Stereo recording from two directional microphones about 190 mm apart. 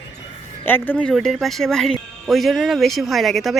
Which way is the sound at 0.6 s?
10° left (ahead or behind).